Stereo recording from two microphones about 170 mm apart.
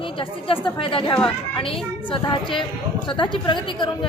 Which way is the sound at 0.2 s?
30° left (ahead or behind).